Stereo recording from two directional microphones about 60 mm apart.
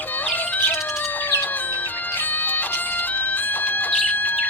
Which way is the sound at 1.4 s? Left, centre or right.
Left.